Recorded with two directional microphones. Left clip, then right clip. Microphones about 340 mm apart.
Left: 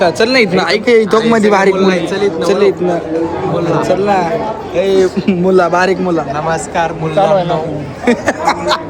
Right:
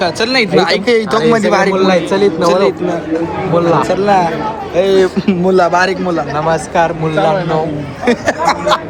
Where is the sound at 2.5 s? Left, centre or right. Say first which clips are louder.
Left 1 dB; centre.